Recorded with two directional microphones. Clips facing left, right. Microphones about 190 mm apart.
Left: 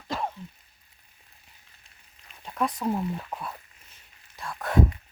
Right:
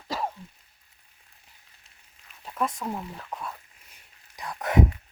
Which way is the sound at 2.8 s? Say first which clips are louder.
Left 6 dB; 10° left (ahead or behind).